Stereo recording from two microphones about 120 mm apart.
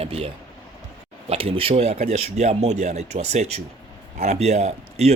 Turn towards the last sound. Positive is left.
turn(degrees=-65)  # may be behind; listen again after turning